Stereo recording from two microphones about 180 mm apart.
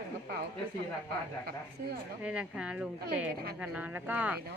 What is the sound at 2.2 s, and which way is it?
Speech, 5° right (ahead or behind).